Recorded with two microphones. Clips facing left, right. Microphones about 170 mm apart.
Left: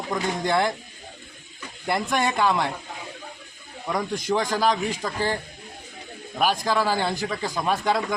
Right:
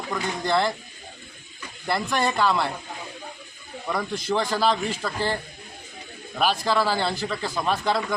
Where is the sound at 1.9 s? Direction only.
15° left (ahead or behind).